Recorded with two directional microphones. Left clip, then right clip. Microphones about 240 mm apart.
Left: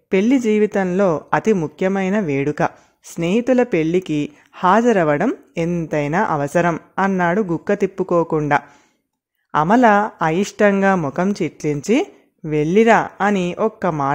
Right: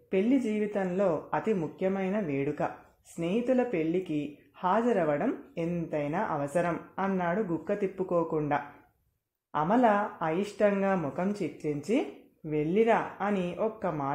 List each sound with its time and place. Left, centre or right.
0.1 s speech: left